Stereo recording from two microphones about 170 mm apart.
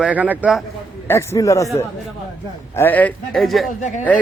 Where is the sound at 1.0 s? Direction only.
15° left (ahead or behind).